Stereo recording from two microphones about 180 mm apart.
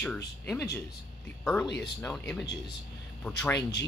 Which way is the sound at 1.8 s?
5° left (ahead or behind).